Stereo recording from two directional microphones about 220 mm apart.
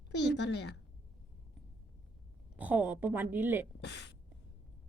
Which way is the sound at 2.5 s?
5° right (ahead or behind).